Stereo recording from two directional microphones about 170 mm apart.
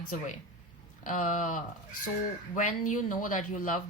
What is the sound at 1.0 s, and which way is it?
Speech, 50° left (ahead or behind).